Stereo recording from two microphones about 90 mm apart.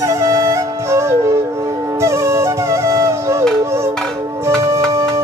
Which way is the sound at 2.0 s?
30° right (ahead or behind).